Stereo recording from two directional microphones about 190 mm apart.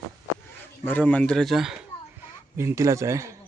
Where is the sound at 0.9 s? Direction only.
10° left (ahead or behind).